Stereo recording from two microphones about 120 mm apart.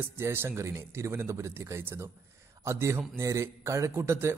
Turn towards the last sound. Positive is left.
turn(degrees=-20)  # may be behind; listen again after turning